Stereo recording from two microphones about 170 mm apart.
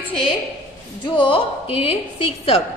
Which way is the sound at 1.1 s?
30° left (ahead or behind).